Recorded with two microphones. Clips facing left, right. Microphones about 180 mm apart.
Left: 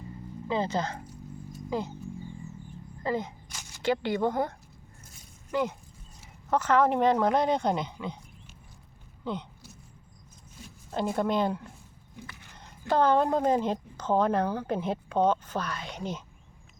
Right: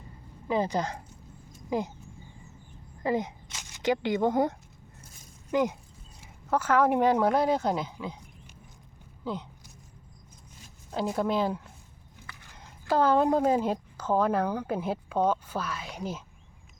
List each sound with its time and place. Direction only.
0.4 s a woman's voice: 15° right (ahead or behind)
3.0 s a woman's voice: 15° right (ahead or behind)
9.2 s speech: 5° right (ahead or behind)
10.9 s speech: centre (ahead or behind)
12.9 s a woman's voice: 5° right (ahead or behind)